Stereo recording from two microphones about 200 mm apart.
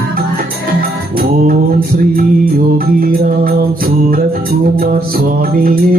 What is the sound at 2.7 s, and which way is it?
Music, 45° right (ahead or behind).